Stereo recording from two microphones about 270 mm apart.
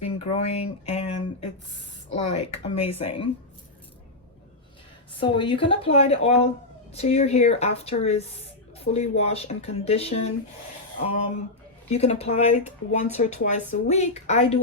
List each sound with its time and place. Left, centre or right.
0.0 s a woman's voice: left
5.2 s a woman's voice: centre
11.9 s a woman's voice: left